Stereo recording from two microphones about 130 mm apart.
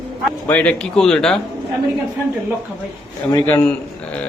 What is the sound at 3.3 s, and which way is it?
Speech, 25° left (ahead or behind).